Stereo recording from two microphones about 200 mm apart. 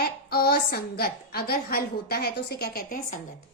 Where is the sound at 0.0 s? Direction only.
50° left (ahead or behind).